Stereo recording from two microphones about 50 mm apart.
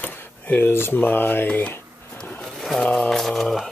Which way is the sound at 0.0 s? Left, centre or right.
Left.